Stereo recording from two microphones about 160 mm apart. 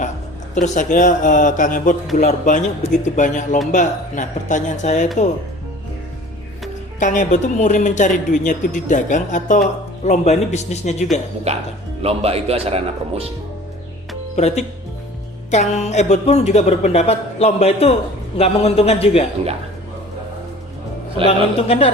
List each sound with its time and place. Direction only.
0.5 s speech: 50° left (ahead or behind)
7.0 s speech: 50° left (ahead or behind)
11.5 s a man's voice: 40° right (ahead or behind)
14.3 s a man's voice: 45° left (ahead or behind)
21.2 s a man's voice: 40° left (ahead or behind)